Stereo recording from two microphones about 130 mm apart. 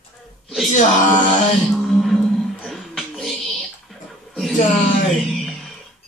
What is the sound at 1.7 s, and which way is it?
Speech, centre (ahead or behind).